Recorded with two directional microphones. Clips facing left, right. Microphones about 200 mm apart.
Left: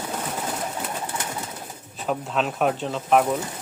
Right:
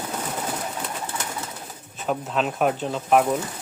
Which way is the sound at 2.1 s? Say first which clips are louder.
Even; centre (ahead or behind).